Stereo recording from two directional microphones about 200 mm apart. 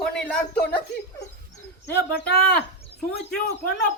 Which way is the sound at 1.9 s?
55° left (ahead or behind).